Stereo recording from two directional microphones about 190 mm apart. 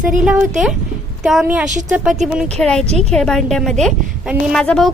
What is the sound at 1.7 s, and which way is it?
Speech, 40° right (ahead or behind).